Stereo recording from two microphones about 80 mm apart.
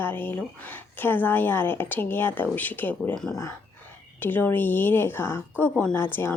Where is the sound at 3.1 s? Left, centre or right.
Centre.